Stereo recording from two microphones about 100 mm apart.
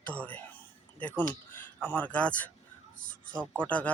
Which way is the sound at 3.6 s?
15° left (ahead or behind).